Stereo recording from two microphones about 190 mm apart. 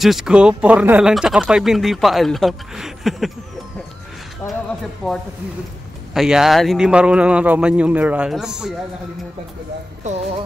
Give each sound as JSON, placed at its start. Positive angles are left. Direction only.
{"t": 0.0, "sound": "speech", "side_deg": 0}
{"t": 5.0, "sound": "speech", "side_deg": 5}
{"t": 10.0, "sound": "speech", "side_deg": -35}